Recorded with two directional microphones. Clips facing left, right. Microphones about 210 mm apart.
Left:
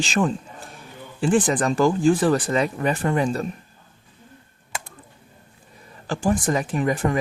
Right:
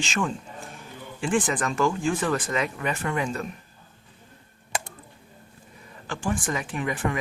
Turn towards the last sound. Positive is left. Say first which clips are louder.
# left 6 dB
turn(degrees=40)  # may be behind; listen again after turning